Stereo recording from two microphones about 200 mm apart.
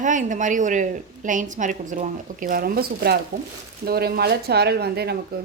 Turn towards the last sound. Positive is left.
turn(degrees=-55)  # may be behind; listen again after turning